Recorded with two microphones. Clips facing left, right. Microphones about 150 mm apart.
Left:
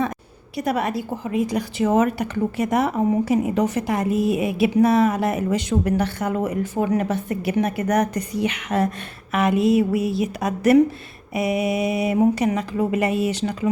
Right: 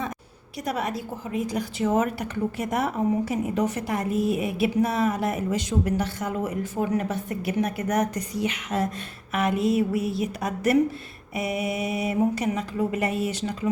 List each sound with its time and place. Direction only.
0.6 s a woman's voice: 65° left (ahead or behind)
9.3 s mantra: 90° left